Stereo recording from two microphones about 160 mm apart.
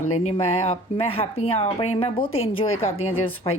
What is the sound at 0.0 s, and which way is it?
Speech, 45° left (ahead or behind).